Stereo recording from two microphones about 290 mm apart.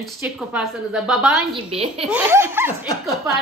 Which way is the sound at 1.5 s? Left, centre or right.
Centre.